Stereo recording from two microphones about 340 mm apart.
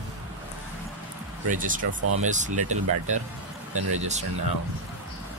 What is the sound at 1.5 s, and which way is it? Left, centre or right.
Speech, right.